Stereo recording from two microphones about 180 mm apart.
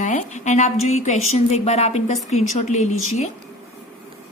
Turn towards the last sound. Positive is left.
turn(degrees=40)  # may be behind; listen again after turning